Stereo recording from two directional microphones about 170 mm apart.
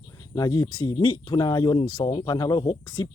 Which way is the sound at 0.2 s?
20° left (ahead or behind).